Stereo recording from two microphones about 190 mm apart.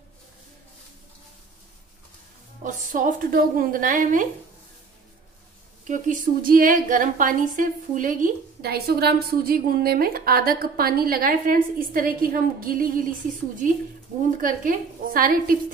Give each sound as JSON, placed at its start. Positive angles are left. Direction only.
{"t": 2.6, "sound": "a woman's voice", "side_deg": -45}
{"t": 5.9, "sound": "a woman's voice", "side_deg": -45}
{"t": 14.4, "sound": "a woman's voice", "side_deg": -45}